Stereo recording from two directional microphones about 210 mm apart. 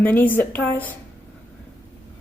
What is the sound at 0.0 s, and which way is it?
Speech, 10° left (ahead or behind).